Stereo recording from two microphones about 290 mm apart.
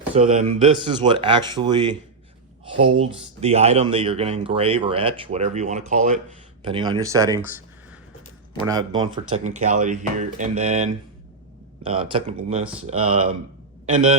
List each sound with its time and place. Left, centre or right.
0.1 s speech: right
2.7 s speech: right
3.0 s speech: right
8.6 s speech: centre